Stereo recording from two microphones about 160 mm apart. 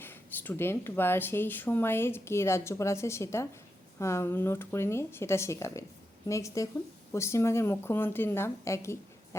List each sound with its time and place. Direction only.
0.0 s speech: 10° left (ahead or behind)